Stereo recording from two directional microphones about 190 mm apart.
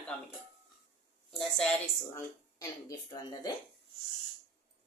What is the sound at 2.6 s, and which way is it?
Speech, 20° left (ahead or behind).